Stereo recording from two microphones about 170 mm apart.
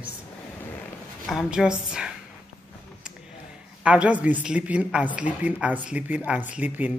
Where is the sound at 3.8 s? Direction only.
5° right (ahead or behind).